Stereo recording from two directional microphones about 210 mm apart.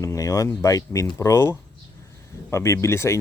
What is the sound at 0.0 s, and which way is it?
Speech, 15° left (ahead or behind).